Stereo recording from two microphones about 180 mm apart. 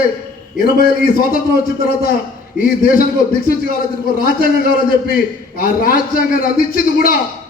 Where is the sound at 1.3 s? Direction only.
55° left (ahead or behind).